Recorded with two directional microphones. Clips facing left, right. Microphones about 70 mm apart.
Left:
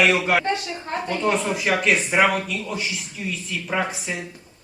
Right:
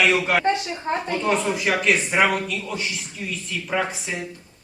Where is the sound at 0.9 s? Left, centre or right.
Right.